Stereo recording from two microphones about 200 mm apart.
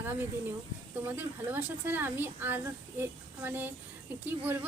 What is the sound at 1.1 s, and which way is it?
Speech, 10° right (ahead or behind).